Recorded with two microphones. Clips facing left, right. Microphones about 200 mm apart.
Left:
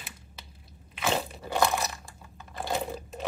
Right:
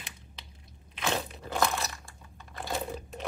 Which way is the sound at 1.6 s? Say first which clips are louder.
Left 4 dB; 15° left (ahead or behind).